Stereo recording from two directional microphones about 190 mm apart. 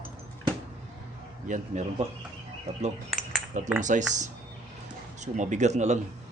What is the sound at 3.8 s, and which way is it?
Speech, 40° right (ahead or behind).